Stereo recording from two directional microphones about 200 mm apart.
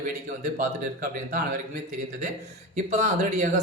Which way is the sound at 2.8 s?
35° right (ahead or behind).